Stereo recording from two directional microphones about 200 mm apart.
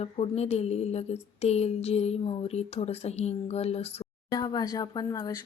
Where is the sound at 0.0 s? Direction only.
30° left (ahead or behind).